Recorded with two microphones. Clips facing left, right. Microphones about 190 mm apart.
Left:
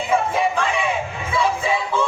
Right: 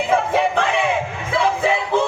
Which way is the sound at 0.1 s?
60° right (ahead or behind).